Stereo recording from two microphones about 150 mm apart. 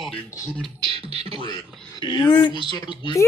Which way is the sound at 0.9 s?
40° right (ahead or behind).